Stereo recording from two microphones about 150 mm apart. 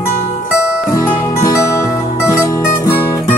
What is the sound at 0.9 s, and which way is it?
Music, 20° left (ahead or behind).